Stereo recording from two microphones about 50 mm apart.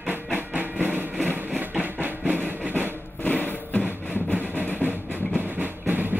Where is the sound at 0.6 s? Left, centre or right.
Right.